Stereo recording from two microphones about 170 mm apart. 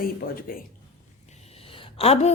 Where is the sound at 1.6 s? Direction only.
30° left (ahead or behind).